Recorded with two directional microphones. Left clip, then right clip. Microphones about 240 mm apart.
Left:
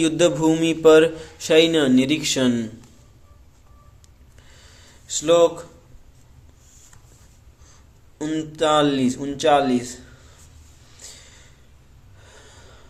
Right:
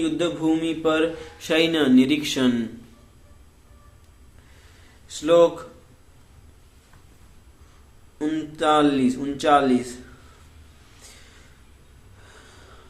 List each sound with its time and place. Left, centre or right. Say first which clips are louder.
0.0 s a man's voice: left 6 dB; left
5.0 s a man's voice: left 1 dB; left
8.2 s a man's voice: left 1 dB; left
12.3 s snort: left 1 dB; centre